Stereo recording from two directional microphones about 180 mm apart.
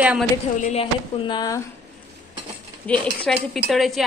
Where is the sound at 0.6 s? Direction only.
35° left (ahead or behind).